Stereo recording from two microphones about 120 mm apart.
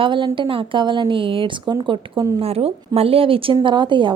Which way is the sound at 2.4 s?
55° right (ahead or behind).